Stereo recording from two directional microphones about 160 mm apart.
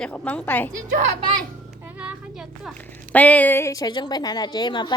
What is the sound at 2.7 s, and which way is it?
A woman's voice, 10° left (ahead or behind).